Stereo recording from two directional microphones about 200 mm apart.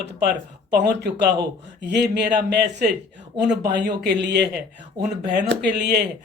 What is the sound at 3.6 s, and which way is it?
Speech, 55° right (ahead or behind).